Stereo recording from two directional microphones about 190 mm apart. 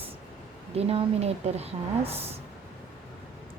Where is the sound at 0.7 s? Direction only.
35° right (ahead or behind).